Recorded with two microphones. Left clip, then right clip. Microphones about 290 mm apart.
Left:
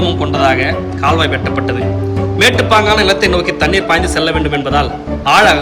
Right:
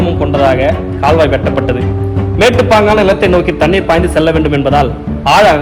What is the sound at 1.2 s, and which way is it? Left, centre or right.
Speech, centre.